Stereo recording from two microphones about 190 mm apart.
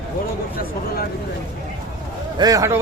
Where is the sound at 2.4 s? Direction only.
20° right (ahead or behind).